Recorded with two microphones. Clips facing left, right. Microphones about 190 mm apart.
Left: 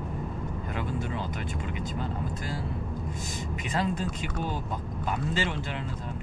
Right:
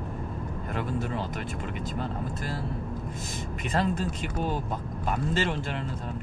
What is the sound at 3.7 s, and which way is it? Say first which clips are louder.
Speech: right 2 dB; 50° right (ahead or behind).